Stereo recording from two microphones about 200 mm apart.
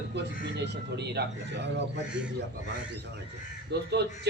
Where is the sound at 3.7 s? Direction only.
55° right (ahead or behind).